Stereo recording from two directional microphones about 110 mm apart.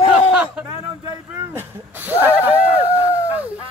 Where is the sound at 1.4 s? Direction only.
20° right (ahead or behind).